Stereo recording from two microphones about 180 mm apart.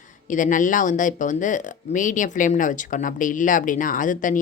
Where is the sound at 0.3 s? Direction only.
45° left (ahead or behind).